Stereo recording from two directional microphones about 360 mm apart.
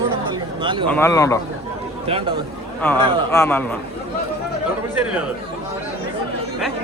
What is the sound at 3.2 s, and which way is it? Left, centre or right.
Speech, centre.